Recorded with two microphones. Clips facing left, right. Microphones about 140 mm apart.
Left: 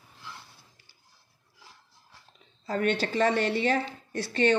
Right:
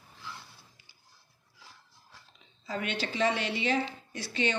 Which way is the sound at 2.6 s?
45° left (ahead or behind).